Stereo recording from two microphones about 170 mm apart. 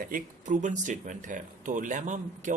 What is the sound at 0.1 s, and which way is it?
Speech, 45° right (ahead or behind).